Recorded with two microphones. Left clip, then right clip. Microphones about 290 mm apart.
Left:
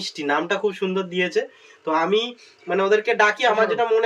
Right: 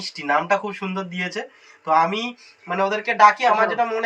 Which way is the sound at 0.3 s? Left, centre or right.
Centre.